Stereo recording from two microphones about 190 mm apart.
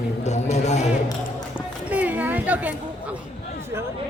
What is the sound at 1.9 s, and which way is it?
A woman's voice, 10° right (ahead or behind).